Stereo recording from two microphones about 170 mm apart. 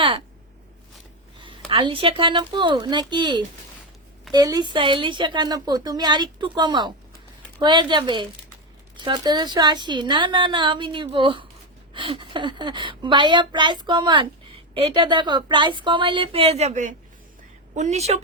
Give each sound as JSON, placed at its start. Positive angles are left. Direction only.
{"t": 1.4, "sound": "a woman's voice", "side_deg": -30}